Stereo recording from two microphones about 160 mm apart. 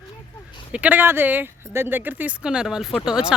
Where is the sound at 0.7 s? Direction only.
10° right (ahead or behind).